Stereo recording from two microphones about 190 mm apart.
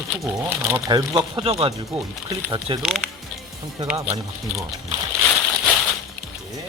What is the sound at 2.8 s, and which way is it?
Speech, centre (ahead or behind).